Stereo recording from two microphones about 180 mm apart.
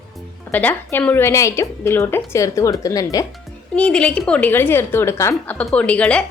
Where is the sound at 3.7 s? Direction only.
5° left (ahead or behind).